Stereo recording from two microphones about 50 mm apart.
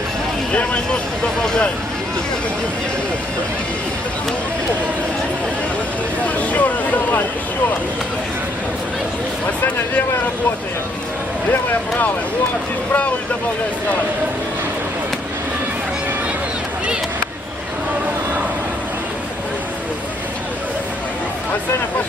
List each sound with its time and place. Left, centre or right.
1.4 s speech: centre
6.2 s vehicle: left